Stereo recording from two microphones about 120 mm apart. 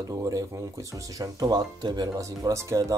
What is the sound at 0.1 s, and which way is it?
Speech, 25° right (ahead or behind).